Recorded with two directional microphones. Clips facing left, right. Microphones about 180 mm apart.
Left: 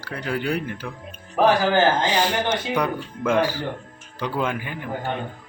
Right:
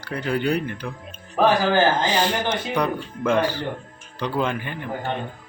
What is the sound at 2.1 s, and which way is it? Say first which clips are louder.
Speech: even; 10° left (ahead or behind).